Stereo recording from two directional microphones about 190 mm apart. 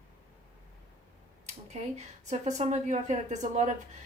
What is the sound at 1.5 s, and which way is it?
A woman's voice, 35° right (ahead or behind).